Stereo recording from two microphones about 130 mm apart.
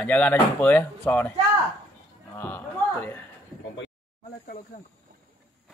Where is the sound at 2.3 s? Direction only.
15° left (ahead or behind).